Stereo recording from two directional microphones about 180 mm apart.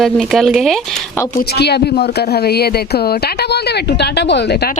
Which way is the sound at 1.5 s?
65° left (ahead or behind).